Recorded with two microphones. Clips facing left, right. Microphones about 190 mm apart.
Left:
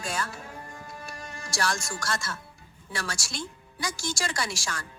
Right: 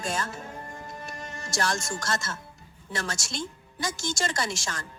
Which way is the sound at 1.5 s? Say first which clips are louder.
Right 1 dB; 25° right (ahead or behind).